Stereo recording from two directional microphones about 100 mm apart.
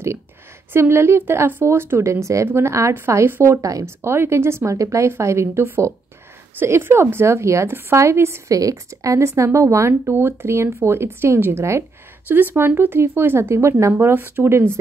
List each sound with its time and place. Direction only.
0.7 s a woman's voice: 25° right (ahead or behind)